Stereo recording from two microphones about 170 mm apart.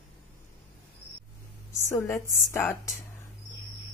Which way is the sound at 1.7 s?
15° left (ahead or behind).